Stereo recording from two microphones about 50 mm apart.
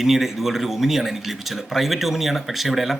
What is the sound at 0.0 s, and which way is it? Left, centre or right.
Speech, centre.